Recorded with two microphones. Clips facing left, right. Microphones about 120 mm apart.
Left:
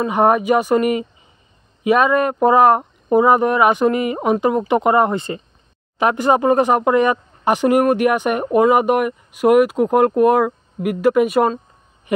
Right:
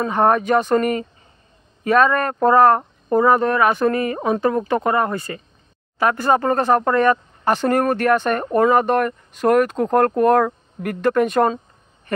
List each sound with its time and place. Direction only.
0.0 s speech: 15° left (ahead or behind)